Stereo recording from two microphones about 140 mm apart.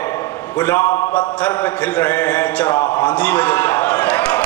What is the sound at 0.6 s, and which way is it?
A man's voice, 20° left (ahead or behind).